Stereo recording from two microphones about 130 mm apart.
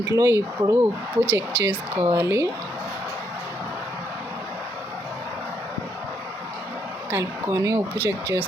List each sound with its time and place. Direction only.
0.0 s speech: 25° right (ahead or behind)
7.1 s speech: 25° right (ahead or behind)